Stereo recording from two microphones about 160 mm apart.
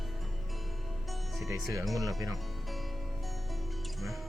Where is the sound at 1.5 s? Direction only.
20° right (ahead or behind).